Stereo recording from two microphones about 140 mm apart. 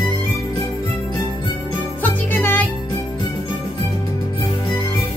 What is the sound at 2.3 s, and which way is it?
Music, 15° left (ahead or behind).